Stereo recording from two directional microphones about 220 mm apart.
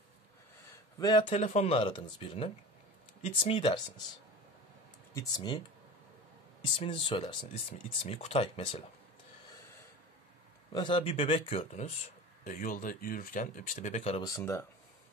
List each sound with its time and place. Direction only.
0.9 s speech: 20° left (ahead or behind)
5.1 s speech: 20° left (ahead or behind)
6.8 s speech: 25° left (ahead or behind)
10.7 s speech: 20° left (ahead or behind)
14.2 s speech: 15° left (ahead or behind)